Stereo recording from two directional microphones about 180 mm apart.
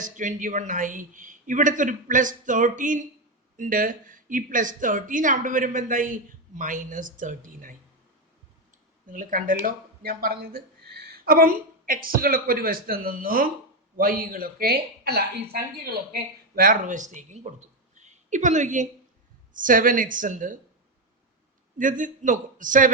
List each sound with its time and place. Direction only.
0.0 s speech: 45° right (ahead or behind)
9.0 s speech: 50° right (ahead or behind)
21.8 s speech: 45° right (ahead or behind)